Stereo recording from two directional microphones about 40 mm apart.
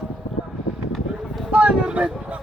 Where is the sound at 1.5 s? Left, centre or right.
Right.